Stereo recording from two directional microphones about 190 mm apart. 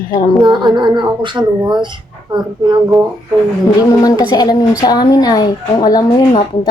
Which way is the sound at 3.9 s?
20° left (ahead or behind).